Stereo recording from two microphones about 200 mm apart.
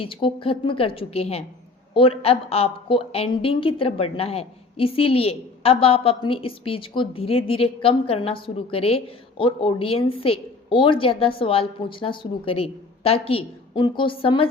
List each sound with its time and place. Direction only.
0.0 s a woman's voice: 25° left (ahead or behind)